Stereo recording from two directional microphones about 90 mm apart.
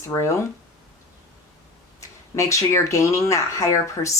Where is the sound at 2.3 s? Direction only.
35° left (ahead or behind).